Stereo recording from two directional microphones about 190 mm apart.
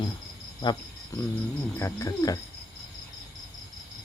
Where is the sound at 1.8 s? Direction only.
15° left (ahead or behind).